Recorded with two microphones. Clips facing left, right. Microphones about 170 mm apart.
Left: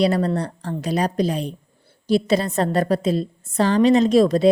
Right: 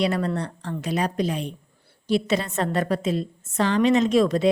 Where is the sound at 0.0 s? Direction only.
35° left (ahead or behind).